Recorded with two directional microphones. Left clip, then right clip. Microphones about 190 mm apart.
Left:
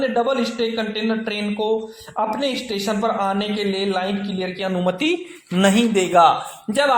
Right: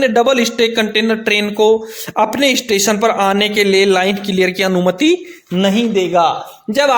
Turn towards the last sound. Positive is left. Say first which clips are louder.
# right 4 dB
turn(degrees=-25)  # may be behind; listen again after turning